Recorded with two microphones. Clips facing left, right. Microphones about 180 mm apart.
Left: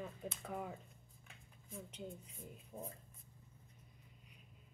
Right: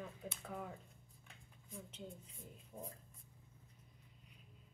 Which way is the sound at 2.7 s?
25° left (ahead or behind).